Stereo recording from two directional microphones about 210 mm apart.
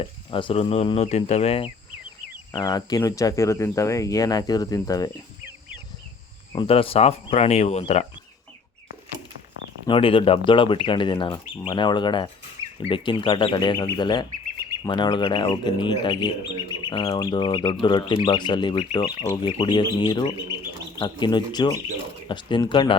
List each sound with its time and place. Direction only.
0.0 s speech: 25° left (ahead or behind)
6.5 s speech: 25° left (ahead or behind)
9.8 s speech: 25° left (ahead or behind)